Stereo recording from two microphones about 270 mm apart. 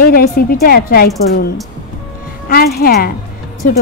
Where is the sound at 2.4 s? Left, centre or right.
Left.